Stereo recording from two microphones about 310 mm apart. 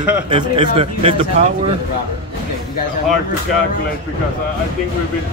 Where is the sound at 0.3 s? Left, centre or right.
Centre.